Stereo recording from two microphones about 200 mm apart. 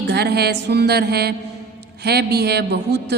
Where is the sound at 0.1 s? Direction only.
55° right (ahead or behind).